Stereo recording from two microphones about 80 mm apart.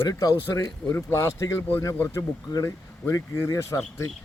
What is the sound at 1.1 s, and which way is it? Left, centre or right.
Speech, left.